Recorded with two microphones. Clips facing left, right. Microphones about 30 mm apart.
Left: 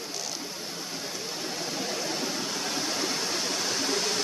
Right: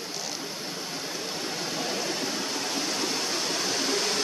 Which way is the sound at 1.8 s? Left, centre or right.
Centre.